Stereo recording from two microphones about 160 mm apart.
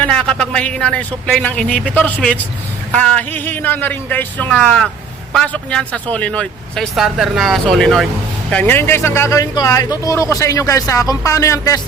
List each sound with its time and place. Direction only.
0.0 s a man's voice: 5° left (ahead or behind)